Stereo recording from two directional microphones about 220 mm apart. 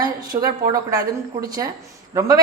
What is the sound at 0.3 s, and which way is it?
A woman's voice, 25° right (ahead or behind).